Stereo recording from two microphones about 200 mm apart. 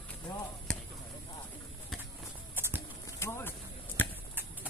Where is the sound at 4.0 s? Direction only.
10° left (ahead or behind).